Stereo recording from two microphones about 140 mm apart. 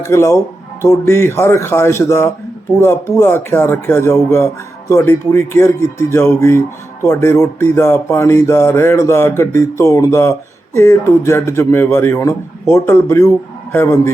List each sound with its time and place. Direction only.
0.0 s speech: 20° left (ahead or behind)